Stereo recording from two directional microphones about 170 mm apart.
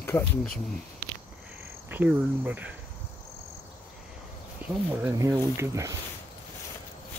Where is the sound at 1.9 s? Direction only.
10° right (ahead or behind).